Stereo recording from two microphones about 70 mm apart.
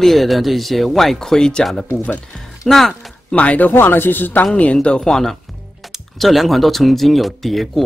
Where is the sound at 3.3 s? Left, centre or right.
Centre.